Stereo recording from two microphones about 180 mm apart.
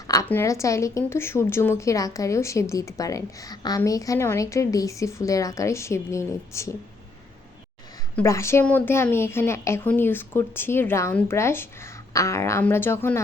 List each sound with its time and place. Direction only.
0.1 s a woman's voice: 15° left (ahead or behind)
8.1 s a woman's voice: 15° left (ahead or behind)